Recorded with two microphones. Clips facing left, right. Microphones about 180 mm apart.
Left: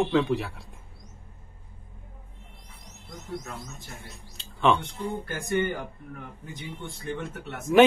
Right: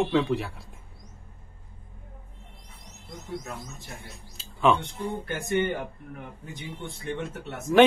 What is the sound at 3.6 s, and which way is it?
Speech, 5° right (ahead or behind).